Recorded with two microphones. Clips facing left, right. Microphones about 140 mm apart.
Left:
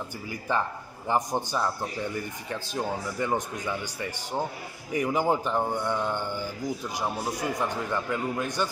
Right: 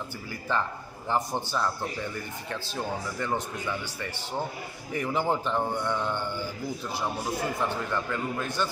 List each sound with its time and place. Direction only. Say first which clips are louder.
0.5 s a man's voice: left 1 dB; 15° left (ahead or behind)
4.9 s a man's voice: left 2 dB; 15° left (ahead or behind)